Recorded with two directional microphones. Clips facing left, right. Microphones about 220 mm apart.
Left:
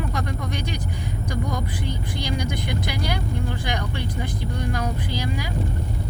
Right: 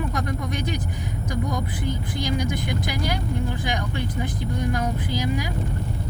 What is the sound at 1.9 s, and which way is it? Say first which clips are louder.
Vehicle: right 5 dB; 50° right (ahead or behind).